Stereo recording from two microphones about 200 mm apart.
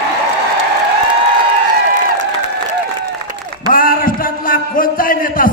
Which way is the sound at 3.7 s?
45° left (ahead or behind).